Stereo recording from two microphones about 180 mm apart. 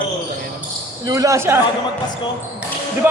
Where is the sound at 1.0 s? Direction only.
20° right (ahead or behind).